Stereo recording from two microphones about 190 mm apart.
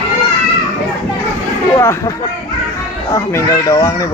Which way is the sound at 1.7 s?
15° left (ahead or behind).